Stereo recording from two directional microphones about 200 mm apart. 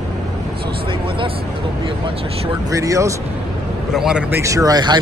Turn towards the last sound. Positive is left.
turn(degrees=-20)  # may be behind; listen again after turning